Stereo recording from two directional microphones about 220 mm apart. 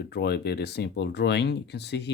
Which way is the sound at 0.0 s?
50° left (ahead or behind).